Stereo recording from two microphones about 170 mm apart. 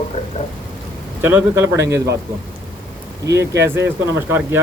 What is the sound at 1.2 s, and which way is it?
Speech, 10° right (ahead or behind).